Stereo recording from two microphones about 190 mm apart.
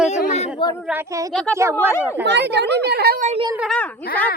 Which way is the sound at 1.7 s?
15° left (ahead or behind).